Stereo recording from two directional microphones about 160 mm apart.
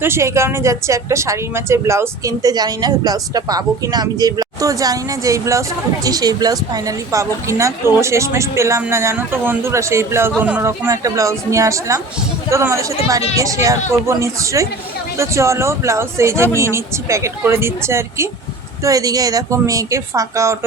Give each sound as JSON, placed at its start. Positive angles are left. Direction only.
{"t": 0.0, "sound": "a woman's voice", "side_deg": -15}